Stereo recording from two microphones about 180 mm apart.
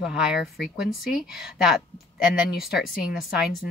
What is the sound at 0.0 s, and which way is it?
Speech, 5° right (ahead or behind).